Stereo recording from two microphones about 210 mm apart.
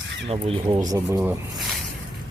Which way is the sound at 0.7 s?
15° right (ahead or behind).